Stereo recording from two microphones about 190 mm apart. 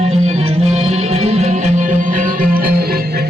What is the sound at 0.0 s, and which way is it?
Music, 35° right (ahead or behind).